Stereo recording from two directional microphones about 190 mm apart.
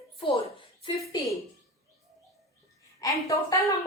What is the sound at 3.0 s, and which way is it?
Speech, 15° left (ahead or behind).